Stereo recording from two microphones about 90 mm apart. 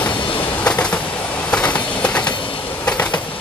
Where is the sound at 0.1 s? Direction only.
65° left (ahead or behind).